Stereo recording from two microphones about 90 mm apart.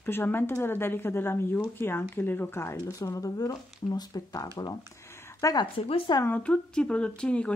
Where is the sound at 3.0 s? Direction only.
40° left (ahead or behind).